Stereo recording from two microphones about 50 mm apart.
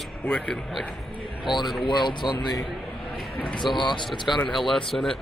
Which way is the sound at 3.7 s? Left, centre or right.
Centre.